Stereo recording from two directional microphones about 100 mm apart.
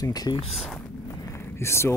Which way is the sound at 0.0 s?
40° left (ahead or behind).